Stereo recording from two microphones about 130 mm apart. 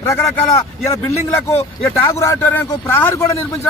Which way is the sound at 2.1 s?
25° left (ahead or behind).